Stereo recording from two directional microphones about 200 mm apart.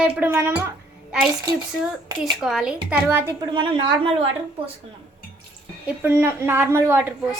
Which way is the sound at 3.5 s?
25° right (ahead or behind).